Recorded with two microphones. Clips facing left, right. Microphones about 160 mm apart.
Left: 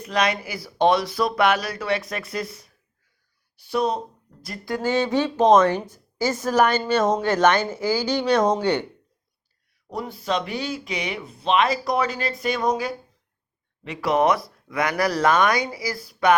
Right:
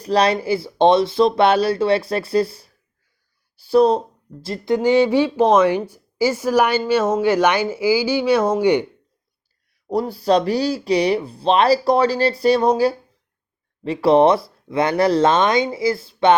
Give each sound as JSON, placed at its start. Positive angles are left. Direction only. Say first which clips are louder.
{"t": 0.0, "sound": "speech", "louder": "right 6 dB", "side_deg": -35}
{"t": 9.9, "sound": "speech", "louder": "right 9 dB", "side_deg": -35}